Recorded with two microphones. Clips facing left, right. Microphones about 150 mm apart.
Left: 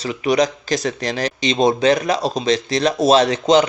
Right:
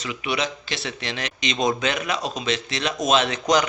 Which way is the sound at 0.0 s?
40° left (ahead or behind).